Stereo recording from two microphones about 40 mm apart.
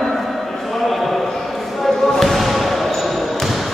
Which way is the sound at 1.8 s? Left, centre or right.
Centre.